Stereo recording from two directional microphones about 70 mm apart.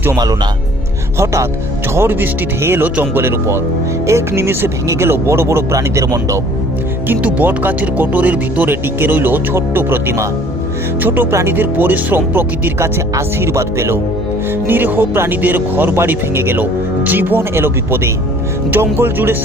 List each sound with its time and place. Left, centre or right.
1.2 s speech: right
2.0 s speech: right
7.1 s speech: right
11.3 s speech: right
11.5 s speech: right
13.1 s speech: right
14.7 s speech: right